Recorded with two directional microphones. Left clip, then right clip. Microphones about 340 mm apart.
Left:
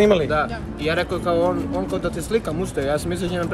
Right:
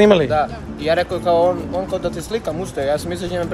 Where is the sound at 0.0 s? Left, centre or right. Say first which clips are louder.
Right 4 dB; right.